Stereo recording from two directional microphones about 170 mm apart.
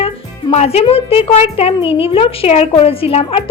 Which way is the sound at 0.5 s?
40° left (ahead or behind).